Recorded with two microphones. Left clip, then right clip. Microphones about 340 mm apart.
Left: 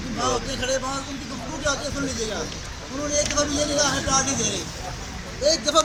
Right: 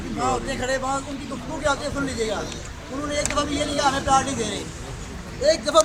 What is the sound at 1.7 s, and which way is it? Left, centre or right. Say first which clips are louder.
Speech: right 2 dB; centre.